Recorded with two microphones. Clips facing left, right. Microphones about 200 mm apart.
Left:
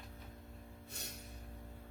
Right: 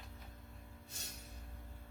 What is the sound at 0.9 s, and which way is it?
Music, 60° left (ahead or behind).